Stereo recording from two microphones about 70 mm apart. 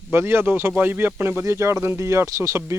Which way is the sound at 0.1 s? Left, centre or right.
Right.